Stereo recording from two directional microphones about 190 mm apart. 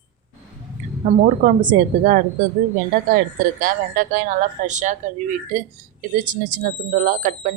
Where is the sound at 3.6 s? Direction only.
45° right (ahead or behind).